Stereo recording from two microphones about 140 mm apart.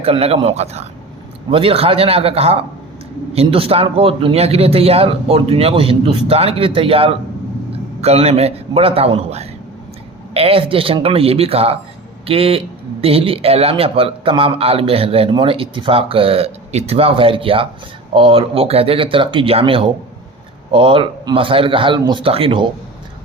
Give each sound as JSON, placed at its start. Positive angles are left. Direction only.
{"t": 0.0, "sound": "speech", "side_deg": -45}